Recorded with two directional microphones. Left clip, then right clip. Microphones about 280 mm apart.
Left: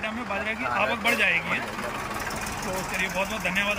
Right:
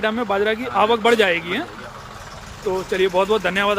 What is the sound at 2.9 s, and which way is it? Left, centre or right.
Speech, centre.